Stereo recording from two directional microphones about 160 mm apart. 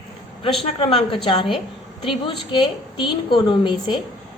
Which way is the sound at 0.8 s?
35° left (ahead or behind).